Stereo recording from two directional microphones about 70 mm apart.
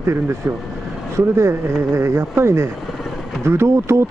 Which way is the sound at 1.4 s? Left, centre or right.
Right.